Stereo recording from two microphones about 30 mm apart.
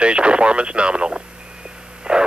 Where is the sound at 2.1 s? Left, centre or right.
Right.